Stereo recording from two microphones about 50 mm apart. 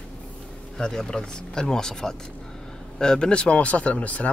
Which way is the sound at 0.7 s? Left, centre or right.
Centre.